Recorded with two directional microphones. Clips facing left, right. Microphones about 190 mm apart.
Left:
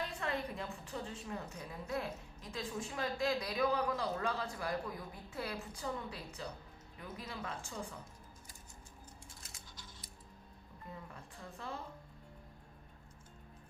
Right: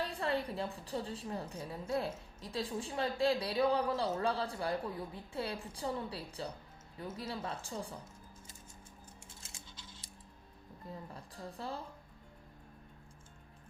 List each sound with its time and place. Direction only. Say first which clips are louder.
0.0 s a woman's voice: right 4 dB; 35° right (ahead or behind)
9.4 s coin: right 1 dB; 25° right (ahead or behind)
10.9 s a woman's voice: right 4 dB; 35° right (ahead or behind)